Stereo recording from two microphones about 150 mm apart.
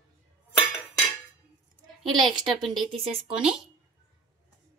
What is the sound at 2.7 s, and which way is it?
Speech, 35° right (ahead or behind).